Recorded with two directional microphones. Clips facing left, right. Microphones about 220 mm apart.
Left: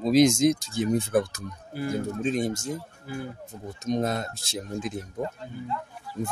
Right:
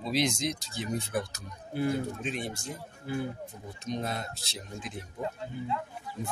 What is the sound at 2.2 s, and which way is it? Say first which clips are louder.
Speech: left 9 dB; 40° left (ahead or behind).